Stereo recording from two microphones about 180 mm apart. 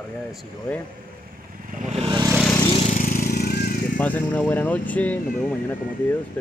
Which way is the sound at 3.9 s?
10° left (ahead or behind).